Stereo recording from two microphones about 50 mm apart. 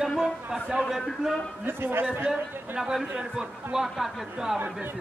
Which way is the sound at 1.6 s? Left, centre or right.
Right.